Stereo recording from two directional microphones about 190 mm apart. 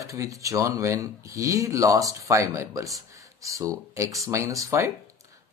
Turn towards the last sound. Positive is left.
turn(degrees=-15)  # may be behind; listen again after turning